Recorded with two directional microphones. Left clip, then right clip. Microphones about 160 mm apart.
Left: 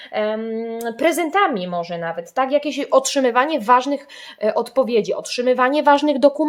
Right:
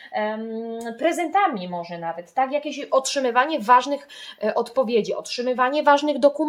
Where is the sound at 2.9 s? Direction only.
30° left (ahead or behind).